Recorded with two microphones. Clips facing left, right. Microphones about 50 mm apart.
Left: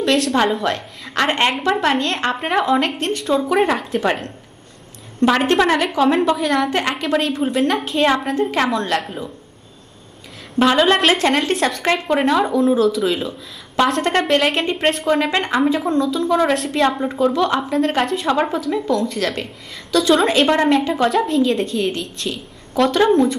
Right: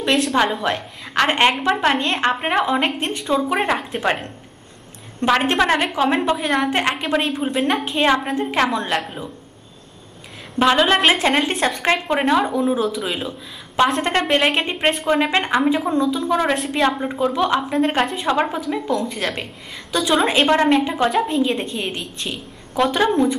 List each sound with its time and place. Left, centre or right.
0.0 s a woman's voice: centre
0.7 s a woman's voice: centre
3.0 s a woman's voice: centre
10.6 s a woman's voice: centre